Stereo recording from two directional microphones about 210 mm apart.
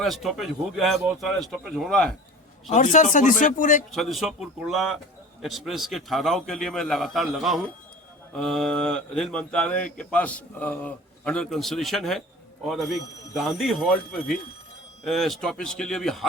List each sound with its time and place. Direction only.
0.0 s speech: centre (ahead or behind)
2.7 s speech: 35° left (ahead or behind)
3.9 s speech: centre (ahead or behind)